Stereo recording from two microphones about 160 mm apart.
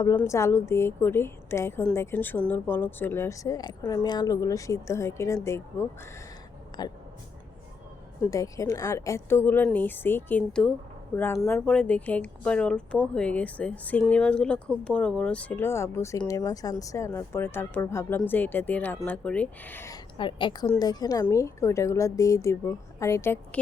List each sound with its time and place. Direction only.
0.2 s speech: 20° left (ahead or behind)
6.7 s speech: 25° left (ahead or behind)
8.3 s a woman's voice: 20° left (ahead or behind)
20.1 s a woman's voice: 30° left (ahead or behind); by 23.6 s 15° left (ahead or behind)